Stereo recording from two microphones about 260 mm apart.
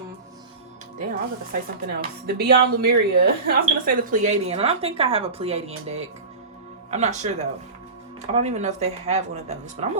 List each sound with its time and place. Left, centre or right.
1.9 s speech: right